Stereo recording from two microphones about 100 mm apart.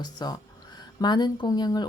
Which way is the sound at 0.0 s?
45° left (ahead or behind).